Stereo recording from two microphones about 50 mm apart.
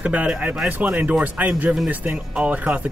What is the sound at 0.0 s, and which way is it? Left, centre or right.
Speech, right.